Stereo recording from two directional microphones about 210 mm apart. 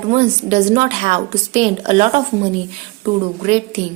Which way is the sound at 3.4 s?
30° right (ahead or behind).